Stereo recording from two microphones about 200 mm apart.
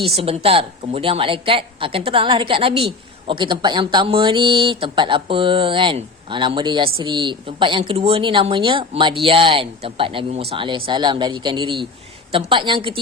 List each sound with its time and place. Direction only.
0.0 s a woman's voice: 30° right (ahead or behind)